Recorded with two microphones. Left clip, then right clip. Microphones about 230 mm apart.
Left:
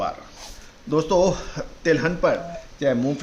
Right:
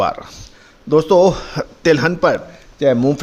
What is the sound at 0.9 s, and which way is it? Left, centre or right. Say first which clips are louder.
A man's voice: right 8 dB; right.